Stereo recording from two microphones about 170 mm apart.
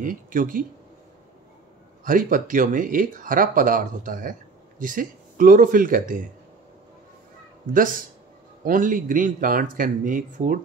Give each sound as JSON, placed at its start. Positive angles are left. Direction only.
{"t": 0.0, "sound": "speech", "side_deg": -55}
{"t": 2.0, "sound": "speech", "side_deg": -55}
{"t": 7.7, "sound": "speech", "side_deg": -55}